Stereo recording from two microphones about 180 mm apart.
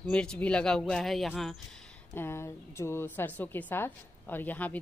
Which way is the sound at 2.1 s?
15° left (ahead or behind).